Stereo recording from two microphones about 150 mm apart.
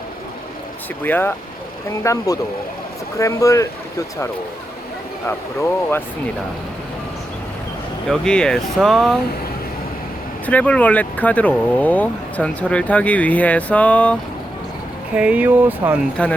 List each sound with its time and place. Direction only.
1.0 s speech: 10° left (ahead or behind)
2.0 s speech: 25° left (ahead or behind)
8.1 s speech: 5° left (ahead or behind)
10.4 s speech: 10° left (ahead or behind)
15.1 s speech: 10° right (ahead or behind)
16.2 s speech: 10° left (ahead or behind)